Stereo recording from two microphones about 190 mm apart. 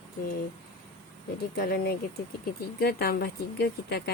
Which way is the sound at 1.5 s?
55° left (ahead or behind).